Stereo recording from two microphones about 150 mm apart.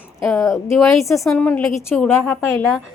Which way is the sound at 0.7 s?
Centre (ahead or behind).